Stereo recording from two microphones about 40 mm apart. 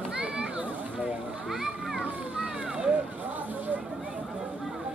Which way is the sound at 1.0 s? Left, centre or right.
Centre.